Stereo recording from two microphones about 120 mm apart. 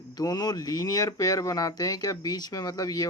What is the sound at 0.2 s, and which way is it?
Speech, 35° left (ahead or behind).